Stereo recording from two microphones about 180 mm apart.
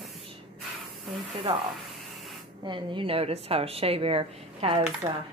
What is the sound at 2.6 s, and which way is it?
A woman's voice, 25° right (ahead or behind).